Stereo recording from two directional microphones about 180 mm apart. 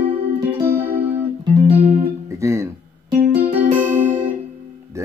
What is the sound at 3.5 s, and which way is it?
Music, 45° right (ahead or behind).